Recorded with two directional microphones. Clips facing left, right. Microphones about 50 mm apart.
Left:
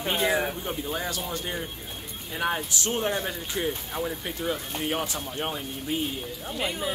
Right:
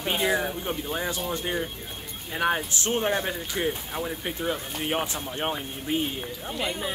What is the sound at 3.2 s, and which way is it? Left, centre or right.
Speech, centre.